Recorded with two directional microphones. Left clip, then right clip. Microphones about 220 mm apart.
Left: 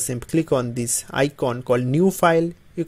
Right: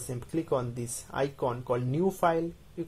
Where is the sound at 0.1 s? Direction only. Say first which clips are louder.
Left 9 dB; 40° left (ahead or behind).